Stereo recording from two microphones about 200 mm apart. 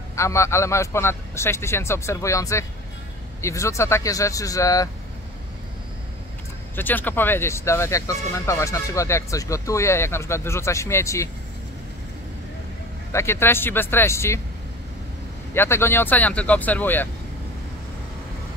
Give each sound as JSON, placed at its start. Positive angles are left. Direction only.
{"t": 0.1, "sound": "speech", "side_deg": 15}
{"t": 6.7, "sound": "speech", "side_deg": 10}
{"t": 13.1, "sound": "speech", "side_deg": 15}
{"t": 15.5, "sound": "speech", "side_deg": 10}